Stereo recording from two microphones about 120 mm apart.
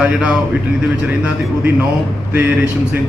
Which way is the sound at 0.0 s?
10° right (ahead or behind).